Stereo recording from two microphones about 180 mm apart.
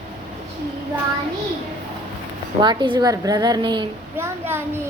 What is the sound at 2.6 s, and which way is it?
A woman's voice, 25° right (ahead or behind).